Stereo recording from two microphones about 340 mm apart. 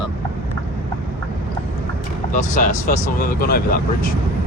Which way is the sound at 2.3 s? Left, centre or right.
Left.